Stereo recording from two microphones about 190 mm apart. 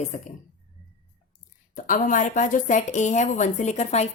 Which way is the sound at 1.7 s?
45° left (ahead or behind).